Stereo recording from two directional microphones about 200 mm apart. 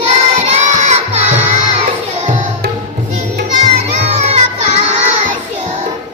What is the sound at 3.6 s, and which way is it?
Music, 30° right (ahead or behind).